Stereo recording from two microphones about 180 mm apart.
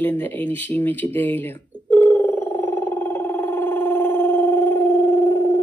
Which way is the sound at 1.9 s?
10° left (ahead or behind).